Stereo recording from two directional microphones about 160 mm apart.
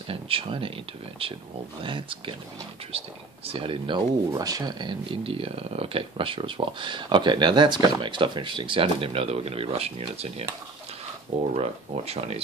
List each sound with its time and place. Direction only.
0.1 s speech: 35° right (ahead or behind)
11.5 s speech: 40° right (ahead or behind)